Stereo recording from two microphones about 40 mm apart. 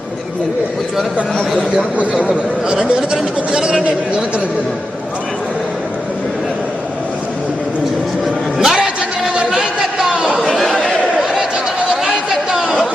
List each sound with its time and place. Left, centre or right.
2.2 s speech: right
8.5 s a sound: centre
11.8 s chatter: right